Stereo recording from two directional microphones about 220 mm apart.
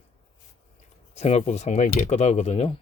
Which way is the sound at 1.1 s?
30° left (ahead or behind).